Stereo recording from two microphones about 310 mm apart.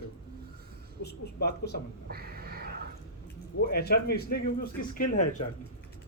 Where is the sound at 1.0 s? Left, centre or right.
Left.